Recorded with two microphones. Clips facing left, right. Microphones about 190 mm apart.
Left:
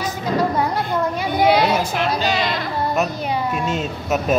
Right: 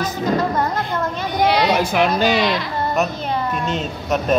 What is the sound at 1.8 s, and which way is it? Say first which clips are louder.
Speech: right 4 dB; 60° right (ahead or behind).